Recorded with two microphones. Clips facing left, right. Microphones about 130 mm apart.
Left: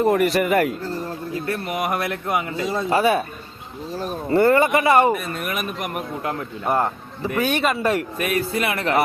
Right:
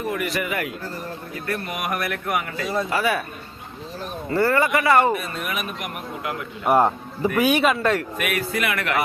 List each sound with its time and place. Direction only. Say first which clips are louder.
0.1 s a man's voice: left 8 dB; 40° left (ahead or behind)
1.5 s speech: left 2 dB; 25° left (ahead or behind)
4.3 s speech: left 4 dB; 20° left (ahead or behind)
6.7 s a man's voice: right 4 dB; 15° right (ahead or behind)
7.8 s speech: left 1 dB; 10° left (ahead or behind)
8.2 s speech: left 2 dB; 30° left (ahead or behind)